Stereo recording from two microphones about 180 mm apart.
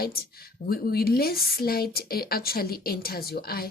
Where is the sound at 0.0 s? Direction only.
60° left (ahead or behind).